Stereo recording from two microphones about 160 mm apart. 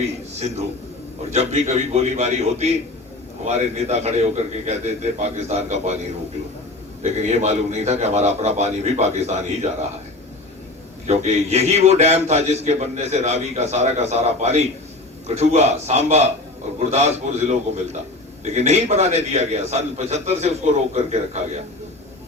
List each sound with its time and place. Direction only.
0.3 s a man's voice: 40° right (ahead or behind)
7.0 s a man's voice: 40° right (ahead or behind)
11.0 s a man's voice: 45° right (ahead or behind)